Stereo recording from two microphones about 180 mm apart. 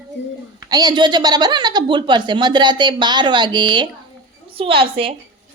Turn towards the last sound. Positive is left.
turn(degrees=-30)  # may be behind; listen again after turning